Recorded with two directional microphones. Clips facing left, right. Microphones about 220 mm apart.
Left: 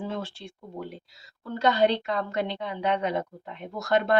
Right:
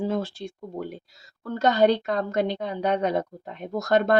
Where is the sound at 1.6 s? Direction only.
45° right (ahead or behind).